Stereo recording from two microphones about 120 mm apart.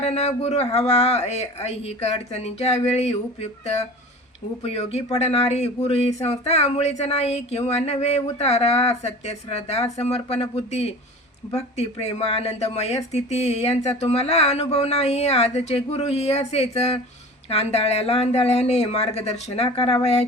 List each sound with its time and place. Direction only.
0.0 s speech: 65° left (ahead or behind)